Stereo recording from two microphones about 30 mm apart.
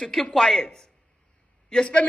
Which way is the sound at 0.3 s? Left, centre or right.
Centre.